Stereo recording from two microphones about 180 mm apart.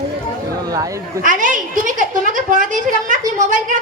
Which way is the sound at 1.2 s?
45° right (ahead or behind).